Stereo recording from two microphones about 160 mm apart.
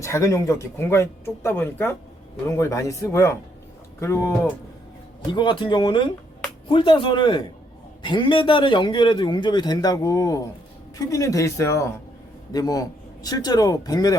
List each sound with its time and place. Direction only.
0.0 s a man's voice: 20° left (ahead or behind)
5.2 s a man's voice: 30° left (ahead or behind)